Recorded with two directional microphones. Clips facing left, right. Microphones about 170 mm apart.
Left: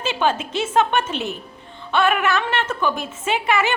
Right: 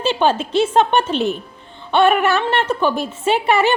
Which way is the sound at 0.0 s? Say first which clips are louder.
Right 4 dB; 30° right (ahead or behind).